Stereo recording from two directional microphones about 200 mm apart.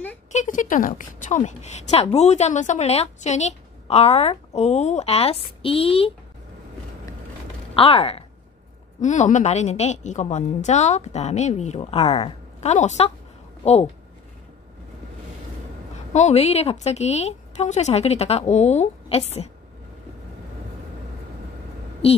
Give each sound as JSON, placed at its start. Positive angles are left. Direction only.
{"t": 0.3, "sound": "a woman's voice", "side_deg": 40}
{"t": 7.7, "sound": "a woman's voice", "side_deg": 30}
{"t": 16.1, "sound": "a woman's voice", "side_deg": 35}
{"t": 22.0, "sound": "speech", "side_deg": 30}